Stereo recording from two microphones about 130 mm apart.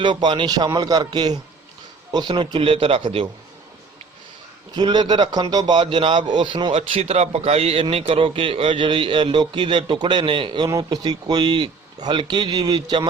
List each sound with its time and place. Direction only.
0.0 s a man's voice: 35° right (ahead or behind)
4.7 s a man's voice: 35° right (ahead or behind)
6.7 s a man's voice: 55° right (ahead or behind); by 13.1 s 35° right (ahead or behind)